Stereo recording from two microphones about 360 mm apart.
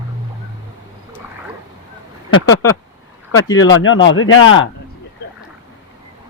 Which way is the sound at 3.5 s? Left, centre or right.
Left.